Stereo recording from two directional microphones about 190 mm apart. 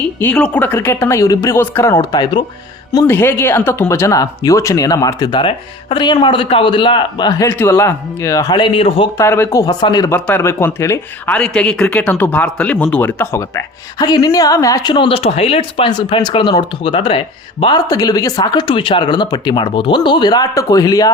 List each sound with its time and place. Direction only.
0.2 s speech: 10° left (ahead or behind); by 9.0 s 30° left (ahead or behind)
9.1 s speech: 15° left (ahead or behind)
10.2 s speech: 10° left (ahead or behind)